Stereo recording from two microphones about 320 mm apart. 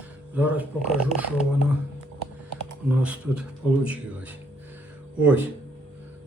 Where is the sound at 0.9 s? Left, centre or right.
Right.